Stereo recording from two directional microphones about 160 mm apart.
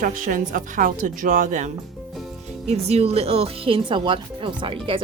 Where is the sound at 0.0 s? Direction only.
55° right (ahead or behind).